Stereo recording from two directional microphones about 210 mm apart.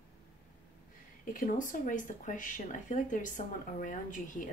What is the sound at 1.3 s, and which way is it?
Speech, 40° left (ahead or behind).